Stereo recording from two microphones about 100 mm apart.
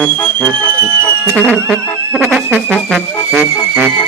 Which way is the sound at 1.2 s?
20° right (ahead or behind).